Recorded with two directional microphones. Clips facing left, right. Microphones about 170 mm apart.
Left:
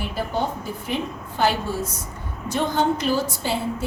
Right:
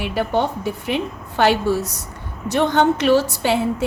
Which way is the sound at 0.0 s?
70° right (ahead or behind).